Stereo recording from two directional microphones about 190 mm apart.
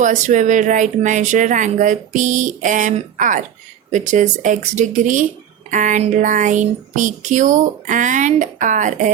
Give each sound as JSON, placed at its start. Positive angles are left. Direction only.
{"t": 0.0, "sound": "speech", "side_deg": -40}